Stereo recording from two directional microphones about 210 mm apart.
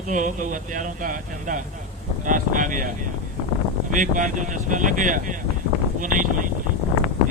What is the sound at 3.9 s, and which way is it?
Speech, 35° right (ahead or behind).